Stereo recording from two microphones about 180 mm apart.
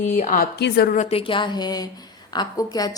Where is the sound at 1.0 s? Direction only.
35° left (ahead or behind).